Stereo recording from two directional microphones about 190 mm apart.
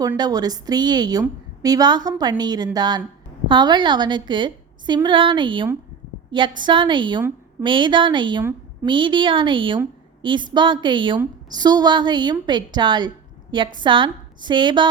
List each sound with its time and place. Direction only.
0.2 s a woman's voice: 20° right (ahead or behind)